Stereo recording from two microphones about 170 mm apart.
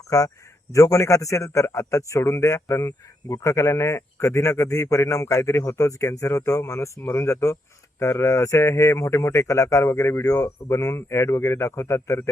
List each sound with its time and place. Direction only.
0.1 s a man's voice: 20° left (ahead or behind)